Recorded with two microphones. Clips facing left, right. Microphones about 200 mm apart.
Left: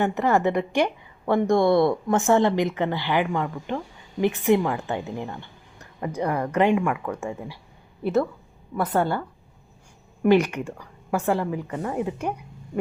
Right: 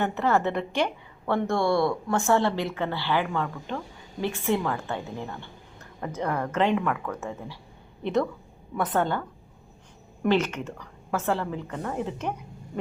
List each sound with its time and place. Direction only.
0.0 s a woman's voice: 15° left (ahead or behind)
10.2 s a woman's voice: 10° left (ahead or behind)